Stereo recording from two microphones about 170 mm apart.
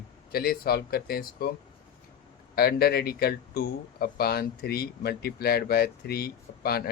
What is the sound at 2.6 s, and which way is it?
Speech, 65° left (ahead or behind).